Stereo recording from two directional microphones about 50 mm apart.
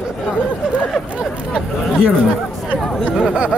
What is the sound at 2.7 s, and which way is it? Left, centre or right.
Speech, centre.